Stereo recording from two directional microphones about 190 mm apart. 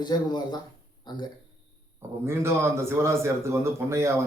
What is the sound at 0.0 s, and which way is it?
A man's voice, 20° left (ahead or behind).